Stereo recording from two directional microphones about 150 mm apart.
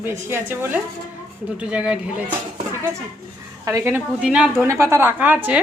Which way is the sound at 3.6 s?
20° right (ahead or behind).